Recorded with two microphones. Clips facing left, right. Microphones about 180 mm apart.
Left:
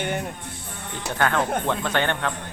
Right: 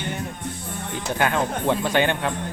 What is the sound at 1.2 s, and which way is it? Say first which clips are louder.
Speech: even; 15° right (ahead or behind).